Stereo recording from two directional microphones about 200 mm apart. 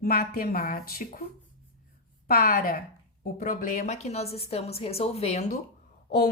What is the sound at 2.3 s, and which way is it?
A woman's voice, 45° left (ahead or behind).